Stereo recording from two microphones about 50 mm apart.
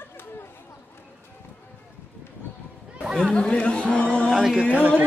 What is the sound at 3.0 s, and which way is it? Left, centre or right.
Chatter, centre.